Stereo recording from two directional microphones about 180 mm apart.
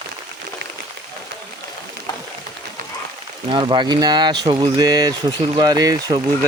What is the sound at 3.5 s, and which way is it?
Speech, 25° right (ahead or behind).